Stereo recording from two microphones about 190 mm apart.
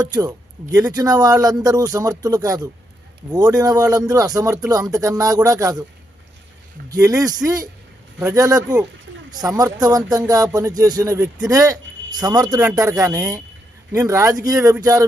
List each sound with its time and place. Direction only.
0.0 s speech: 20° right (ahead or behind)
7.4 s speech: 20° right (ahead or behind)